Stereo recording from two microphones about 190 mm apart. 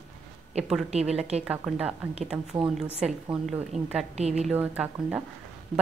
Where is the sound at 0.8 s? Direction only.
35° right (ahead or behind).